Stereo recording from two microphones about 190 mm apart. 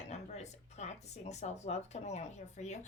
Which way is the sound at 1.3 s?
35° left (ahead or behind).